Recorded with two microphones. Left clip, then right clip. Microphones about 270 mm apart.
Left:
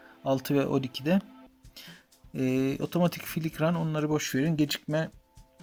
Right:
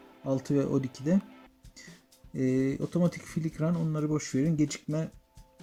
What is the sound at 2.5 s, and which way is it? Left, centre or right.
Speech, left.